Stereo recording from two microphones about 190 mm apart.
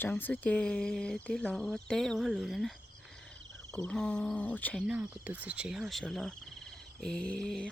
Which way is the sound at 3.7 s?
5° left (ahead or behind).